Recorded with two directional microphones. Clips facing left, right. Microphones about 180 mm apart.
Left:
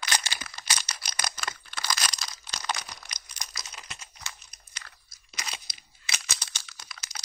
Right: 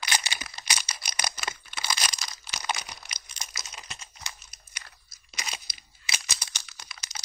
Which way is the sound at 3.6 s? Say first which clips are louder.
Right 1 dB; 25° right (ahead or behind).